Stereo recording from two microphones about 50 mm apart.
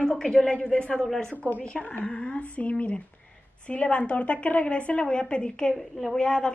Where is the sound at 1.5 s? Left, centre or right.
Left.